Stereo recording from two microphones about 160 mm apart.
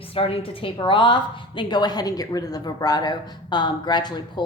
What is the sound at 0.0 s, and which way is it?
A woman's voice, 35° left (ahead or behind).